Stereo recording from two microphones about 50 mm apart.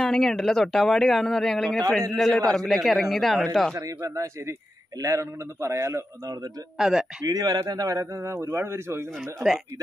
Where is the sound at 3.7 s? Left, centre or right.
Right.